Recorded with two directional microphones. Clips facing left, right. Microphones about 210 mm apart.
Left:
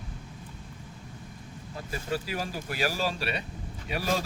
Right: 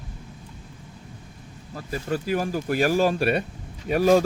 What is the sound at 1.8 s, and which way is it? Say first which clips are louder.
Speech: right 7 dB; 45° right (ahead or behind).